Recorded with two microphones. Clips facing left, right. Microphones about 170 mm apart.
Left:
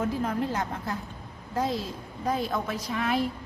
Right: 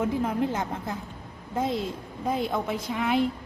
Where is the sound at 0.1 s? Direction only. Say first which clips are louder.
Right 2 dB; 20° right (ahead or behind).